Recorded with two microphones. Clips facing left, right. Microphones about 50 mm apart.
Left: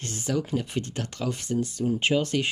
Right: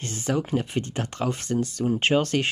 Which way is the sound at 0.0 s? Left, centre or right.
Right.